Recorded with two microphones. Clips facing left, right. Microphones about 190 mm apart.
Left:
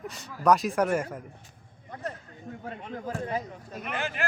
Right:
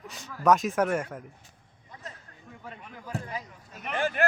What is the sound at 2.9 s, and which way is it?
Speech, 50° left (ahead or behind).